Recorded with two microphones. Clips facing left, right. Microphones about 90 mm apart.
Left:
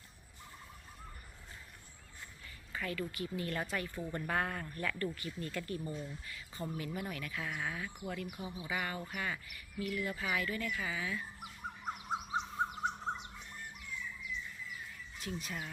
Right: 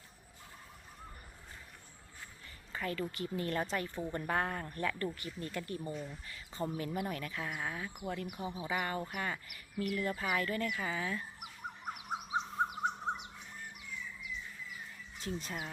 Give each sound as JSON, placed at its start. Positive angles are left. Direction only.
{"t": 2.7, "sound": "a woman's voice", "side_deg": -30}
{"t": 8.0, "sound": "speech", "side_deg": -35}
{"t": 11.9, "sound": "bird", "side_deg": -10}
{"t": 15.2, "sound": "speech", "side_deg": -30}